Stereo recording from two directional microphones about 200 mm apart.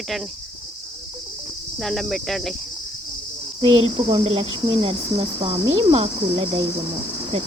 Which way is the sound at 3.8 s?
25° right (ahead or behind).